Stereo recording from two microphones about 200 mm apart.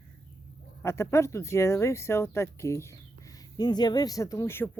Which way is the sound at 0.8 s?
15° left (ahead or behind).